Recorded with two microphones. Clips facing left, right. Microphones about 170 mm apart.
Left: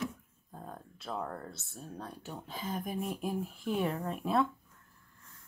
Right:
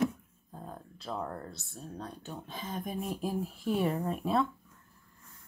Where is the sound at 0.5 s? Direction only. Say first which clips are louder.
Right 1 dB; centre (ahead or behind).